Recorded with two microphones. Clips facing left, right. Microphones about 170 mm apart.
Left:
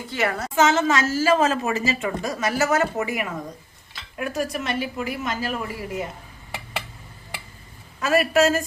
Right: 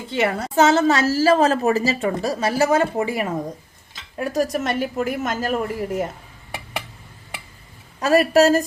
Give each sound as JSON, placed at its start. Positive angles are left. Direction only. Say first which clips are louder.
{"t": 0.1, "sound": "a woman's voice", "louder": "right 4 dB", "side_deg": -25}
{"t": 7.9, "sound": "a woman's voice", "louder": "right 4 dB", "side_deg": -35}